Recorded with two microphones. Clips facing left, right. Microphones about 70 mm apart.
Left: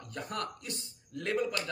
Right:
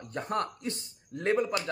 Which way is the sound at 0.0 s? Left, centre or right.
Right.